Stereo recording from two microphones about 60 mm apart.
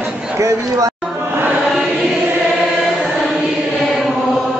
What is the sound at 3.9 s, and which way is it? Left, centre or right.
Chant, centre.